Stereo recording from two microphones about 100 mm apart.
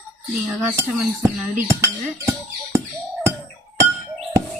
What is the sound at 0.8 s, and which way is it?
Speech, 25° right (ahead or behind).